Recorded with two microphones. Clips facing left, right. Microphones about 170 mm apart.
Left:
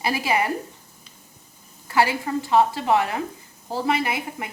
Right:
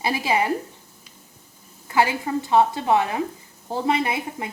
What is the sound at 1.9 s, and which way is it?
Speech, 20° right (ahead or behind).